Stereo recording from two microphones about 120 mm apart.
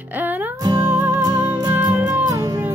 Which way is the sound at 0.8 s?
20° right (ahead or behind).